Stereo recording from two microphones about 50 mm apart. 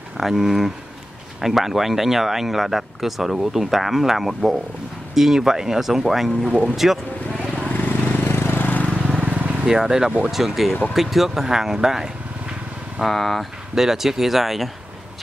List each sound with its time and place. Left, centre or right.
0.2 s speech: centre
7.5 s vehicle: left
8.8 s vehicle: left
9.2 s vehicle: right
9.7 s speech: centre
13.0 s speech: centre
13.7 s speech: centre